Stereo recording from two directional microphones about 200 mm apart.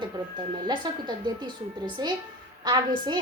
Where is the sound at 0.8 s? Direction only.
20° right (ahead or behind).